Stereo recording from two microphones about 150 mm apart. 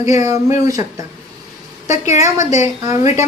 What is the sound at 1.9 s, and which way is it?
Speech, 50° left (ahead or behind).